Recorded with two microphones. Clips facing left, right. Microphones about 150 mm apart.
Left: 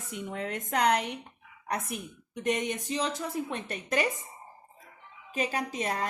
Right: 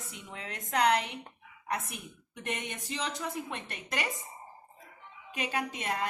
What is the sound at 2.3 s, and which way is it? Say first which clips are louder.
A woman's voice: left 8 dB; 35° left (ahead or behind).